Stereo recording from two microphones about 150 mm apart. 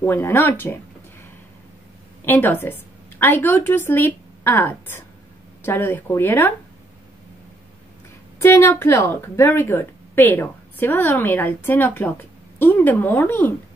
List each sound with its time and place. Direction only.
0.0 s speech: 15° left (ahead or behind)
2.2 s a woman's voice: 10° left (ahead or behind)
8.4 s speech: 20° left (ahead or behind)